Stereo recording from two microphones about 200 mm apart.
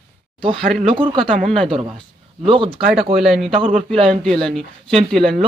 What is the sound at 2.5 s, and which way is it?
Speech, 25° right (ahead or behind).